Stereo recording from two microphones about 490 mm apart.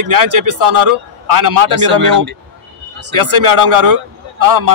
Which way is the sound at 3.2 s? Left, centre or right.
Right.